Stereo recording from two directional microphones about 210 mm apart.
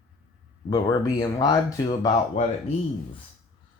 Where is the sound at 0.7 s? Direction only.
15° left (ahead or behind).